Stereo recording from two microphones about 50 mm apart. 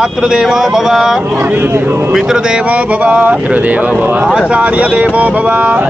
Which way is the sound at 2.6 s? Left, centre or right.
Right.